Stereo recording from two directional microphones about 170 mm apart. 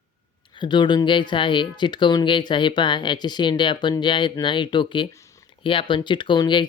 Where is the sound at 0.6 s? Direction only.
25° left (ahead or behind).